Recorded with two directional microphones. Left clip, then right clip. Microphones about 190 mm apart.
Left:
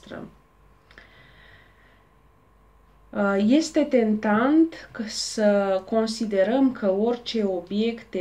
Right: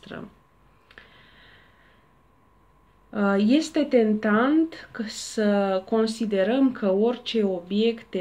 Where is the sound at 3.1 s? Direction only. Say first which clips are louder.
Left 1 dB; 50° right (ahead or behind).